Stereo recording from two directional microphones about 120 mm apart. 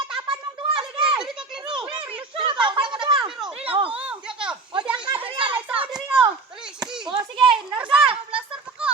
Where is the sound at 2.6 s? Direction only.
40° right (ahead or behind).